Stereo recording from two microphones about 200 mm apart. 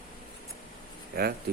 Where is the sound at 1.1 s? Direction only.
50° right (ahead or behind).